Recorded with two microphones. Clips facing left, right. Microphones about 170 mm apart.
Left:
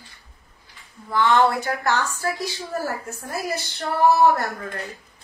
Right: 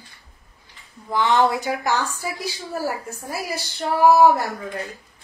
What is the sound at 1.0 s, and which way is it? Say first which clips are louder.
A woman's voice: even; 15° right (ahead or behind).